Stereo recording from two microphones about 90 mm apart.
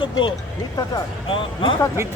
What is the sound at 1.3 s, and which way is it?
Speech, 75° left (ahead or behind).